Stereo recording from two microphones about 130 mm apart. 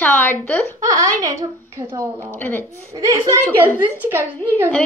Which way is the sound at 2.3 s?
15° left (ahead or behind).